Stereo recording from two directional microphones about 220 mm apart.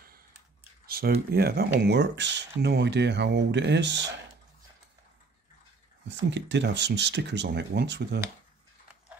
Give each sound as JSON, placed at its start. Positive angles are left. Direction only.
{"t": 0.8, "sound": "a sound", "side_deg": -45}
{"t": 1.3, "sound": "speech", "side_deg": -45}
{"t": 6.0, "sound": "speech", "side_deg": -50}